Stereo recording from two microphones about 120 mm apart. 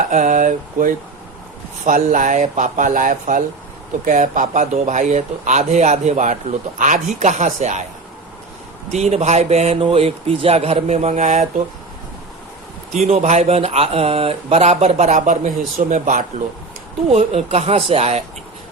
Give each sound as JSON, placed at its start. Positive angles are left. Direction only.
{"t": 0.1, "sound": "speech", "side_deg": -90}
{"t": 8.9, "sound": "a man's voice", "side_deg": -65}
{"t": 12.9, "sound": "a man's voice", "side_deg": -65}
{"t": 15.9, "sound": "speech", "side_deg": -90}
{"t": 17.1, "sound": "a man's voice", "side_deg": -60}